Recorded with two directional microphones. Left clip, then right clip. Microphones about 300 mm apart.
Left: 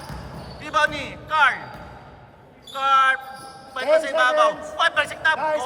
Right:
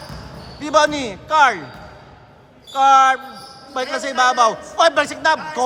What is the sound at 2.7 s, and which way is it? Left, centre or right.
A man's voice, centre.